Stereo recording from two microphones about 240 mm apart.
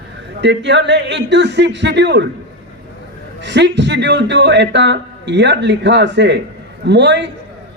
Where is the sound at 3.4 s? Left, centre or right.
Right.